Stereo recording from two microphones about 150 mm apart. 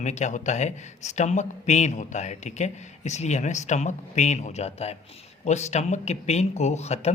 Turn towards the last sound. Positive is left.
turn(degrees=45)  # may be behind; listen again after turning